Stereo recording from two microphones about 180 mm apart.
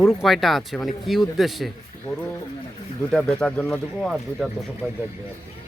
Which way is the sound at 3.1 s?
5° left (ahead or behind).